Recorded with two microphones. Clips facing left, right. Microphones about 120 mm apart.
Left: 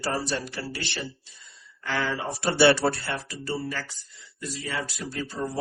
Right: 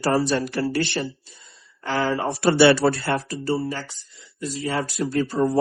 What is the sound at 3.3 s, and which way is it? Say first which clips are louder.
Speech: right 6 dB; 35° right (ahead or behind).